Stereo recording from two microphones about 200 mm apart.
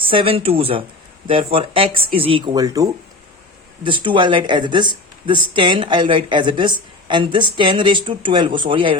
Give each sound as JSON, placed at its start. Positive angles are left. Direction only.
{"t": 0.0, "sound": "a woman's voice", "side_deg": -25}